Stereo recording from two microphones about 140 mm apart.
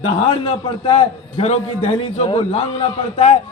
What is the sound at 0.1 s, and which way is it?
A man's voice, 35° left (ahead or behind).